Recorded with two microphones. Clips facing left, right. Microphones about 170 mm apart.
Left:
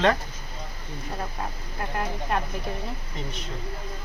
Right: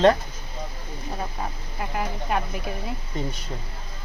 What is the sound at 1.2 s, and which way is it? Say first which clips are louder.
Speech: right 2 dB; 5° right (ahead or behind).